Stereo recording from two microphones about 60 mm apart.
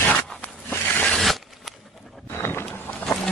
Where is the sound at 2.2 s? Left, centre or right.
Left.